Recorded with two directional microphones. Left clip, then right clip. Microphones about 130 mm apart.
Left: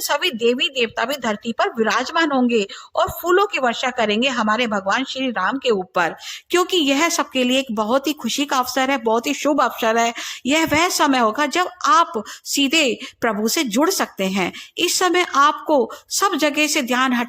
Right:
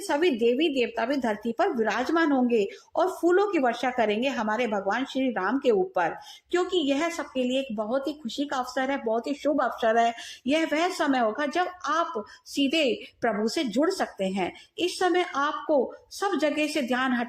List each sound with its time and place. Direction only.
0.1 s a woman's voice: 40° left (ahead or behind)